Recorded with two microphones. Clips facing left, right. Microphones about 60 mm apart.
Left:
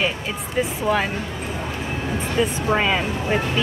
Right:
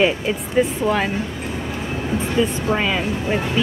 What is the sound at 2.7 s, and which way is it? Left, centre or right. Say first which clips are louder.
Speech: even; centre.